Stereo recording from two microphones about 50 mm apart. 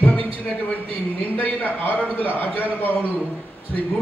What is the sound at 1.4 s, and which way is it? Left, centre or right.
A man's voice, left.